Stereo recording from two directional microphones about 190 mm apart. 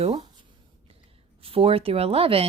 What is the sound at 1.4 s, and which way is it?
Speech, 30° right (ahead or behind).